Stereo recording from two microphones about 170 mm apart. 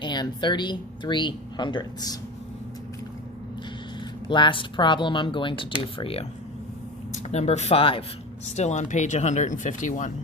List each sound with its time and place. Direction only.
0.0 s speech: 25° left (ahead or behind)
4.3 s speech: 30° left (ahead or behind)
8.5 s speech: 45° left (ahead or behind)